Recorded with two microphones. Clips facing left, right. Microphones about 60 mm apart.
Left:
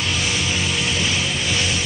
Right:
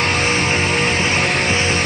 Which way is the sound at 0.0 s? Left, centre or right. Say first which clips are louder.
Right 6 dB; right.